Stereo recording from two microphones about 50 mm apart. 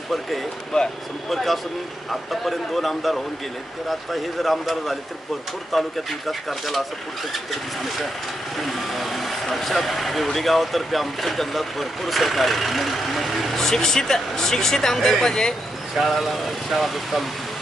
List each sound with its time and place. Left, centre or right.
0.7 s speech: centre
1.3 s speech: centre
16.0 s speech: centre